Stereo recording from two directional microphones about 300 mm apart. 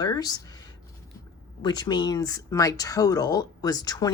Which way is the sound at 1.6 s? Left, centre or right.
Centre.